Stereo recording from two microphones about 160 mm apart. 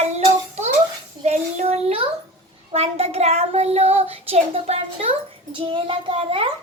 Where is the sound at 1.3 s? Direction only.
40° right (ahead or behind).